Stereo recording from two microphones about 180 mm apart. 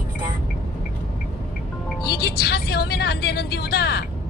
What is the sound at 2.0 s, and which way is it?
A woman's voice, 60° left (ahead or behind).